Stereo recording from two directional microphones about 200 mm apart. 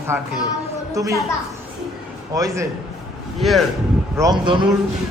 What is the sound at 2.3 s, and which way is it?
Speech, 15° right (ahead or behind).